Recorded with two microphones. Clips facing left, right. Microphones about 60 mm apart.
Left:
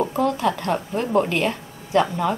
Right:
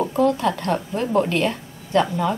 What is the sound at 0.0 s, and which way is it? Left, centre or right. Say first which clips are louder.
A woman's voice: right 2 dB; centre.